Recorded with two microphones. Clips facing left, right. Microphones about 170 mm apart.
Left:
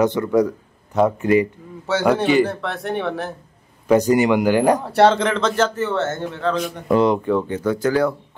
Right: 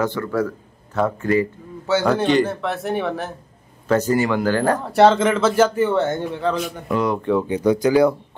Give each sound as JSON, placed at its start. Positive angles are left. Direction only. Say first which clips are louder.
{"t": 0.0, "sound": "a man's voice", "louder": "left 5 dB", "side_deg": 20}
{"t": 1.9, "sound": "speech", "louder": "even", "side_deg": 0}
{"t": 3.8, "sound": "a man's voice", "louder": "left 3 dB", "side_deg": 15}
{"t": 4.8, "sound": "speech", "louder": "right 1 dB", "side_deg": 0}
{"t": 7.2, "sound": "speech", "louder": "even", "side_deg": 0}
{"t": 7.4, "sound": "speech", "louder": "right 3 dB", "side_deg": -15}